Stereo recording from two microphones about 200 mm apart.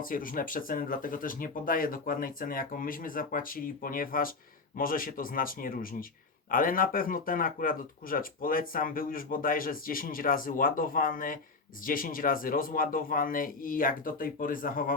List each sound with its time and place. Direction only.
0.0 s speech: 45° left (ahead or behind)